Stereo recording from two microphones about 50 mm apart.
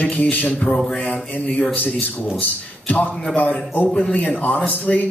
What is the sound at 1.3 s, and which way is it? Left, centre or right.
A man's voice, left.